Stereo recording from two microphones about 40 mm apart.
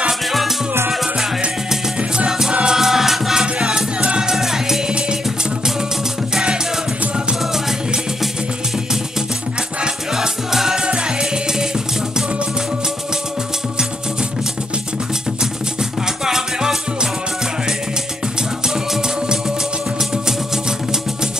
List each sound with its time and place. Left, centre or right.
2.1 s music: centre
3.5 s music: right
4.3 s music: centre
10.1 s music: centre
16.3 s music: centre